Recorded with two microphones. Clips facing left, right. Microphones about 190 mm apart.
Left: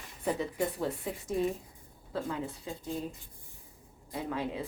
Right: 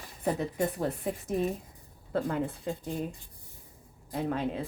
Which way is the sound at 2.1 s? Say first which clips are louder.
Right 5 dB; 55° right (ahead or behind).